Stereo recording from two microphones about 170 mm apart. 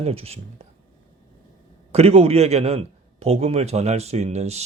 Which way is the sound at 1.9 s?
35° right (ahead or behind).